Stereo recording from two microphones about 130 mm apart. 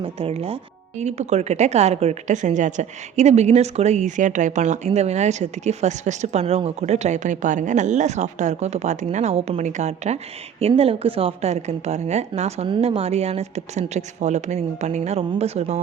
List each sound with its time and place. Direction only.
0.0 s speech: 50° right (ahead or behind)
10.6 s speech: 50° right (ahead or behind)
12.6 s speech: 45° right (ahead or behind)